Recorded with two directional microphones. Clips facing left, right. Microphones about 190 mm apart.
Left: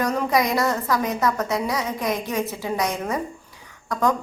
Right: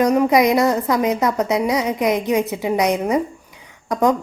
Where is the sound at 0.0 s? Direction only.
15° right (ahead or behind).